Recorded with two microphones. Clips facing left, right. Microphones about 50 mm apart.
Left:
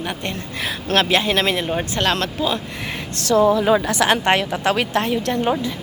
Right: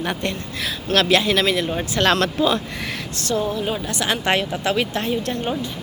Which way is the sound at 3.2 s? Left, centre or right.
Left.